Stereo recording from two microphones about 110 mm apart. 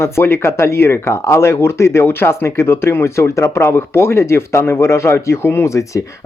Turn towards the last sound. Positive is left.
turn(degrees=30)  # may be behind; listen again after turning